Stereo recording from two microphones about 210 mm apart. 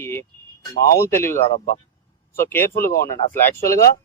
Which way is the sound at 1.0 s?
10° left (ahead or behind).